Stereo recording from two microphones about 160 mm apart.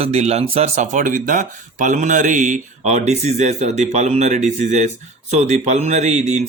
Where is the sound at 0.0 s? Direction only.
40° right (ahead or behind).